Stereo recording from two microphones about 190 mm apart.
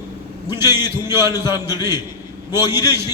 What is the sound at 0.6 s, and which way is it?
A man's voice, 20° left (ahead or behind).